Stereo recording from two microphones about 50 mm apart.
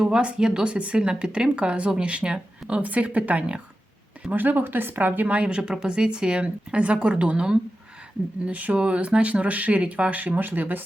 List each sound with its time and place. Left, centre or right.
0.0 s speech: centre
4.3 s speech: right